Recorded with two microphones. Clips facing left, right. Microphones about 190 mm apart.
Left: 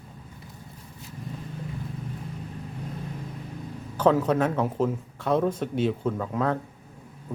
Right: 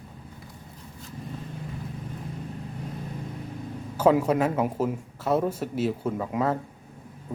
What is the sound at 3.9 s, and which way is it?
A man's voice, 10° right (ahead or behind).